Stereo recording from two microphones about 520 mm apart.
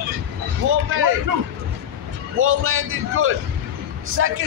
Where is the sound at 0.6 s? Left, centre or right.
Right.